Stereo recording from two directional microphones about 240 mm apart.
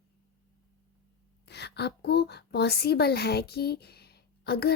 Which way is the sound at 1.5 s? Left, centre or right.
Left.